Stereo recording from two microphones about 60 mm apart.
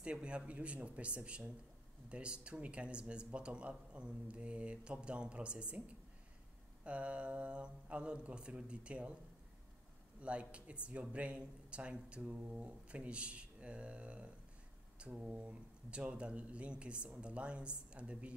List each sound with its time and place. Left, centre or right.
0.0 s speech: centre
6.8 s speech: right
10.2 s speech: centre